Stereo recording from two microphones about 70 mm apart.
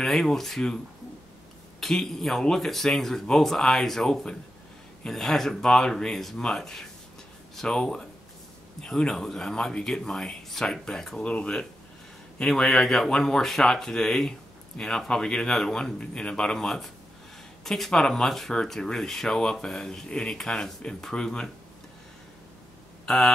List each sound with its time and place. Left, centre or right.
0.0 s speech: centre
1.8 s speech: centre
23.0 s hum: centre